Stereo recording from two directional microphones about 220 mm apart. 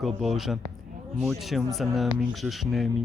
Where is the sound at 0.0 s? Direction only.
Centre (ahead or behind).